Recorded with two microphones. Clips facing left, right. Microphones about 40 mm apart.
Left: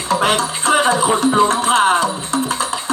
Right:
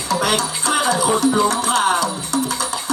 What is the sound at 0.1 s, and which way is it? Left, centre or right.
Music, left.